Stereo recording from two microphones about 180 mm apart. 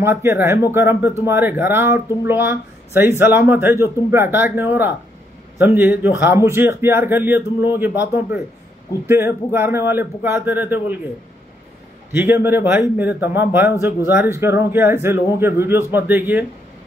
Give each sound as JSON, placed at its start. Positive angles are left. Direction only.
{"t": 0.0, "sound": "speech", "side_deg": -15}
{"t": 12.1, "sound": "speech", "side_deg": -10}